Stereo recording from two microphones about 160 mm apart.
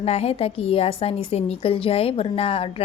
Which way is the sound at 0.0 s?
40° left (ahead or behind).